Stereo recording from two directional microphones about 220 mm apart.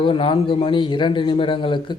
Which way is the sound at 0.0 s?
25° left (ahead or behind).